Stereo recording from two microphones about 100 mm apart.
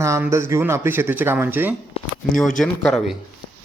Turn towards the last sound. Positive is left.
turn(degrees=5)  # may be behind; listen again after turning